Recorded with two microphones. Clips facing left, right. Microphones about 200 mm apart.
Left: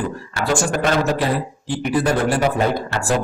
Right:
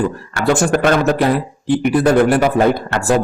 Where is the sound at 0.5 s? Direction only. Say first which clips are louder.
Right 5 dB; 55° right (ahead or behind).